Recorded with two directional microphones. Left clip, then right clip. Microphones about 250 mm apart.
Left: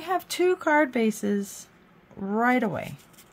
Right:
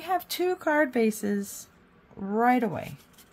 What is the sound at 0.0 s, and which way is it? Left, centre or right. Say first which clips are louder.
Speech: left 3 dB; centre.